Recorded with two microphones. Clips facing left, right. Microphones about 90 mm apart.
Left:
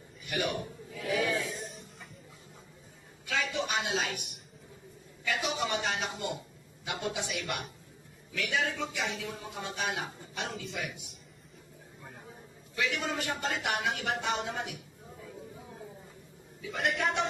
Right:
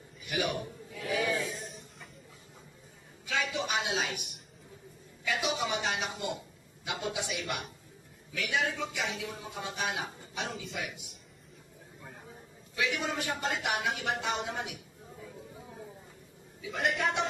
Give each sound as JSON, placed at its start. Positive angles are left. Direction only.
{"t": 1.1, "sound": "music", "side_deg": -5}
{"t": 3.3, "sound": "a man's voice", "side_deg": -5}
{"t": 12.7, "sound": "a man's voice", "side_deg": -5}
{"t": 16.6, "sound": "a man's voice", "side_deg": 0}